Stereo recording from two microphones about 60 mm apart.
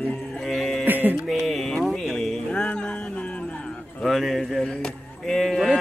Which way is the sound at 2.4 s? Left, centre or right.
Centre.